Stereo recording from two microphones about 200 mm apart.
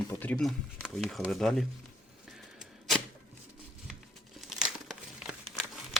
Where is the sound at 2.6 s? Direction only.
Centre (ahead or behind).